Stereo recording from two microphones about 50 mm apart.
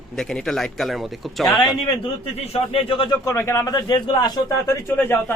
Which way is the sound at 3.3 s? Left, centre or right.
Left.